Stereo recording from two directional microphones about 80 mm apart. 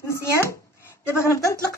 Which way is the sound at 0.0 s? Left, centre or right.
Left.